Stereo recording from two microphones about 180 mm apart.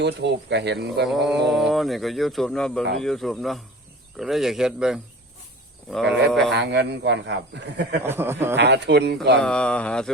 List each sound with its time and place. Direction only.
0.0 s speech: 70° right (ahead or behind)
1.0 s speech: centre (ahead or behind)
6.1 s speech: 70° right (ahead or behind)
8.0 s speech: 15° right (ahead or behind)
8.5 s speech: 70° right (ahead or behind)
9.4 s speech: 5° left (ahead or behind)